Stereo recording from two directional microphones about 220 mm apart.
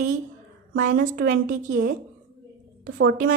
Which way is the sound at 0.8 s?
40° right (ahead or behind).